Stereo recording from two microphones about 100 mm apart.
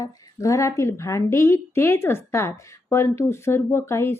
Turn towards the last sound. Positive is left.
turn(degrees=25)  # may be behind; listen again after turning